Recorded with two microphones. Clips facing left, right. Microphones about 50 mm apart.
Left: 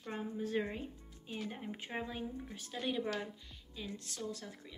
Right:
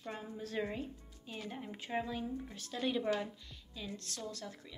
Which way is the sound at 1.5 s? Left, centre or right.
Centre.